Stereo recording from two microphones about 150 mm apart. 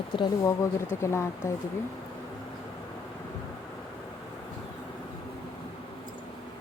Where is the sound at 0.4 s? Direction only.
20° left (ahead or behind).